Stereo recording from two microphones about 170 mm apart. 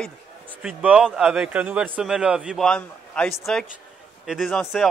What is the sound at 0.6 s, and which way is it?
Speech, 5° right (ahead or behind).